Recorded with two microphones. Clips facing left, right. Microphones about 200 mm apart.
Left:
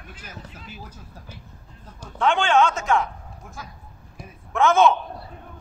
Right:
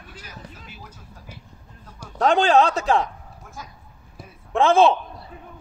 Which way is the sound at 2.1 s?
40° right (ahead or behind).